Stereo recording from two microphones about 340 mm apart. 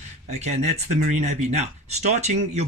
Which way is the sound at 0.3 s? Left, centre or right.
Centre.